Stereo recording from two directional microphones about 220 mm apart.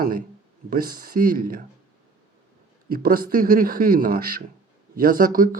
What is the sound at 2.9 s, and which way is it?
Speech, 40° right (ahead or behind).